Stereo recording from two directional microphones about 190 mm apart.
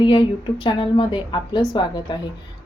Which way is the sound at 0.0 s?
25° left (ahead or behind).